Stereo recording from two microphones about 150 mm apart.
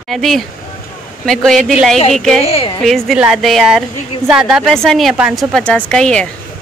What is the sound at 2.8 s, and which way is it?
Speech, centre (ahead or behind).